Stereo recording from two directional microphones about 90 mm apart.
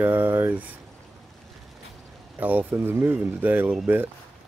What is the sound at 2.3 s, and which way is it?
Speech, 20° right (ahead or behind).